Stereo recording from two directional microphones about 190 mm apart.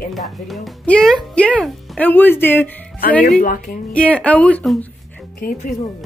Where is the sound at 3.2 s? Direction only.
50° left (ahead or behind).